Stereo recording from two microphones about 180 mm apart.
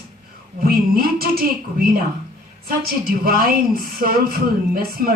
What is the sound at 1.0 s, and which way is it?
A woman's voice, 55° right (ahead or behind).